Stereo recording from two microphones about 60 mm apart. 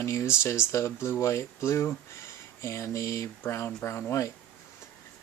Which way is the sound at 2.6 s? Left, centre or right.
Left.